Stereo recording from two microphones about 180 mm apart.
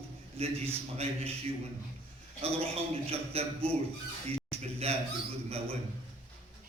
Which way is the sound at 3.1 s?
35° right (ahead or behind).